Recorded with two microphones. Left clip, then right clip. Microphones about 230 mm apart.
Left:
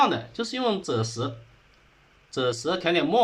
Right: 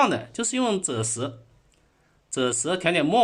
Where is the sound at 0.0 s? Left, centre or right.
Right.